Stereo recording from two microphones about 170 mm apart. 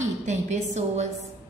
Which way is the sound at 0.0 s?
45° right (ahead or behind).